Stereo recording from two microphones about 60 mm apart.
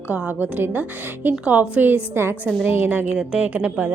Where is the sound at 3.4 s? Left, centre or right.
Right.